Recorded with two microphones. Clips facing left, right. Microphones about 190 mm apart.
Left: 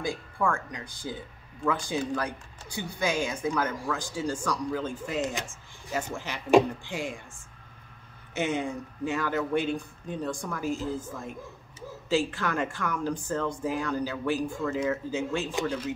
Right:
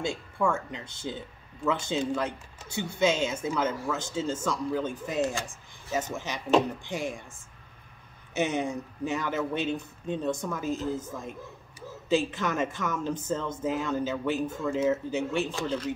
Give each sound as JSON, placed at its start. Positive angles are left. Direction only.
{"t": 0.0, "sound": "speech", "side_deg": -25}
{"t": 8.4, "sound": "speech", "side_deg": -15}
{"t": 15.5, "sound": "speech", "side_deg": 10}